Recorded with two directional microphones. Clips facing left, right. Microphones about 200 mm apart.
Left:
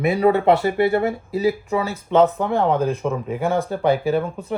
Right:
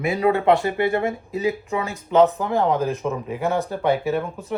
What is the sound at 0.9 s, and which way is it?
Speech, 35° left (ahead or behind).